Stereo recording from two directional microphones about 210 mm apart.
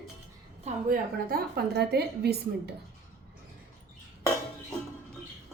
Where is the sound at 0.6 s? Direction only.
45° right (ahead or behind).